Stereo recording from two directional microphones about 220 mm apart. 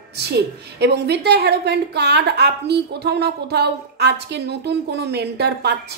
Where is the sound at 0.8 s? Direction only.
50° right (ahead or behind).